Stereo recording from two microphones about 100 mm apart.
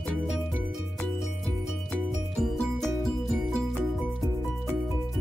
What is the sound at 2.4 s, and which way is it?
Music, centre (ahead or behind).